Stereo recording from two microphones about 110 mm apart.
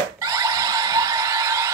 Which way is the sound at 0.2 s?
30° right (ahead or behind).